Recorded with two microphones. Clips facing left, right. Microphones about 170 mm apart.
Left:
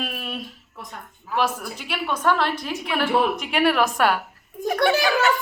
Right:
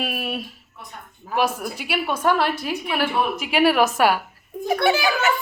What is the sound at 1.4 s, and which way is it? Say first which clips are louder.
A woman's voice: right 2 dB; 10° right (ahead or behind).